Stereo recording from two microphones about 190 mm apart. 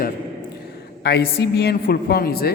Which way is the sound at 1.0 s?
60° left (ahead or behind).